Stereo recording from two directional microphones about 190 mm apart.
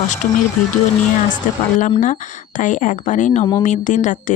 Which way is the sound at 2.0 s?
40° left (ahead or behind).